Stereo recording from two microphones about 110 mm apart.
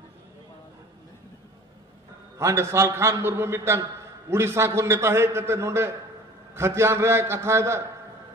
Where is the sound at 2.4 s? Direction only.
25° right (ahead or behind).